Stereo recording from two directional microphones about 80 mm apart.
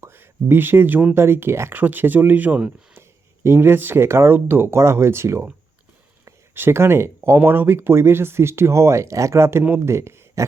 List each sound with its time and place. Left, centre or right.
0.0 s speech: right
1.8 s speech: right
3.4 s a man's voice: right